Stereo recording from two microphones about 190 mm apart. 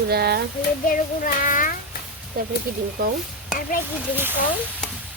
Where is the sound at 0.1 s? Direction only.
60° right (ahead or behind).